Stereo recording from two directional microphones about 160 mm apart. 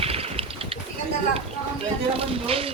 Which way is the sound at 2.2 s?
35° right (ahead or behind).